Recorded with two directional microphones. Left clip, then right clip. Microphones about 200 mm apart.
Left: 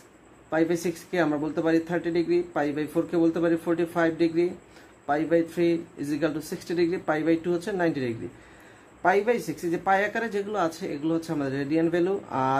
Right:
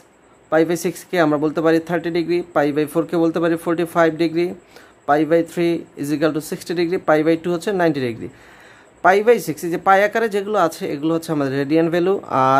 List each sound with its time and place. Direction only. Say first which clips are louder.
0.5 s speech: right 8 dB; 45° right (ahead or behind)